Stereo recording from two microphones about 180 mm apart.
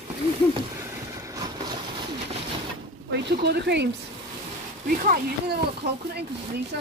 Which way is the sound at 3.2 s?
65° right (ahead or behind).